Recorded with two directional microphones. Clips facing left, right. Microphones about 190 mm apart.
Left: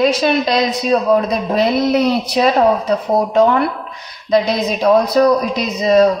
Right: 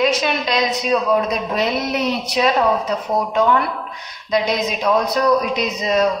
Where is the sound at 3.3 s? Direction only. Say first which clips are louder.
Left 4 dB; 35° left (ahead or behind).